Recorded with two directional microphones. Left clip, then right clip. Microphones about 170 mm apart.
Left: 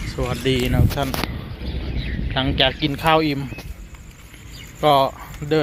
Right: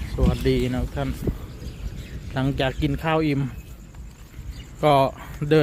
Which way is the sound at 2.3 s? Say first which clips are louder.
Left 6 dB; 30° right (ahead or behind).